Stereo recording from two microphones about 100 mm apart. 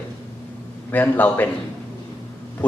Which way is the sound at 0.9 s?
20° left (ahead or behind).